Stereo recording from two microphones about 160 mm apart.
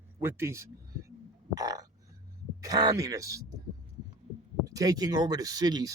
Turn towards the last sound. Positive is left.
turn(degrees=-25)  # may be behind; listen again after turning